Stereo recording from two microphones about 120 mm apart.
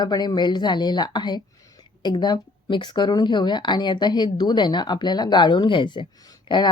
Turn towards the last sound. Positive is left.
turn(degrees=40)  # may be behind; listen again after turning